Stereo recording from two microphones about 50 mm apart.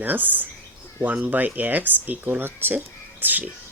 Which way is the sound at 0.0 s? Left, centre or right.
Right.